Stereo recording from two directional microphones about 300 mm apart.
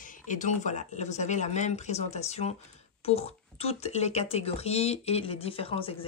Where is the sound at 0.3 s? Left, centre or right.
Left.